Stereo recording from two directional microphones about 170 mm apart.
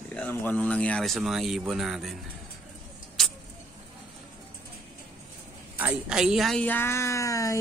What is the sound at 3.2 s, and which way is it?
Vehicle, centre (ahead or behind).